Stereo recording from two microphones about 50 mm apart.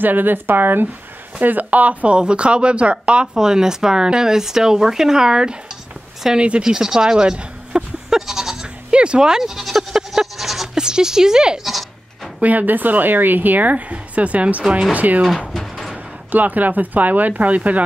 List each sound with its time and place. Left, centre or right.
0.0 s speech: right; by 5.6 s centre
6.4 s a sound: centre
8.9 s bleat: centre
12.4 s a woman's voice: right
15.5 s a sound: centre
16.3 s a woman's voice: right